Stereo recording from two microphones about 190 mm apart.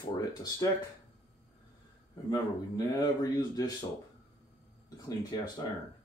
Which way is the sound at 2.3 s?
20° left (ahead or behind).